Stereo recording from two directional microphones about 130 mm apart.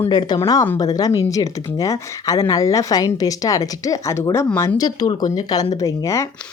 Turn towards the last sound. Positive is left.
turn(degrees=25)  # may be behind; listen again after turning